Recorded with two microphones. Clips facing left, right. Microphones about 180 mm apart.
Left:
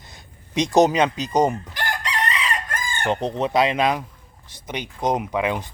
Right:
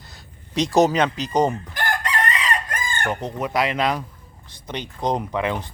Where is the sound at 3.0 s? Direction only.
30° left (ahead or behind).